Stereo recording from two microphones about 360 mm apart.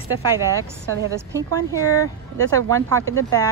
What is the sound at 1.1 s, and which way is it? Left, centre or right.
Speech, centre.